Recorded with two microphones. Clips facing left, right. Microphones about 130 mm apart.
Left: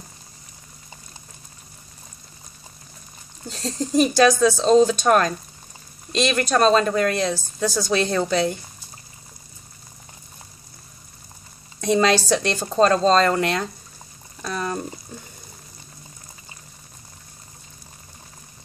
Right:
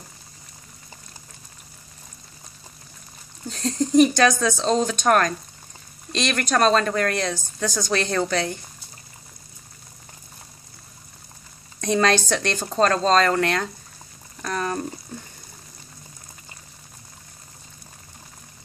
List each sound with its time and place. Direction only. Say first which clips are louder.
3.5 s a woman's voice: right 3 dB; 5° left (ahead or behind)
11.8 s a woman's voice: left 2 dB; 5° left (ahead or behind)
14.4 s a sound: right 1 dB; 10° left (ahead or behind)